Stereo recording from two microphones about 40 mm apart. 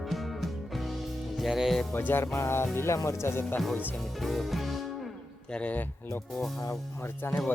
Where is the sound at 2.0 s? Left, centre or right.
Left.